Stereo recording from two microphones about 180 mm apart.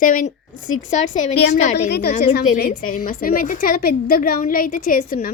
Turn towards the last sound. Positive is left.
turn(degrees=50)  # may be behind; listen again after turning